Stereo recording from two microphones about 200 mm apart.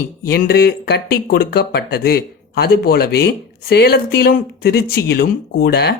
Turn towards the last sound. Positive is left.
turn(degrees=55)  # may be behind; listen again after turning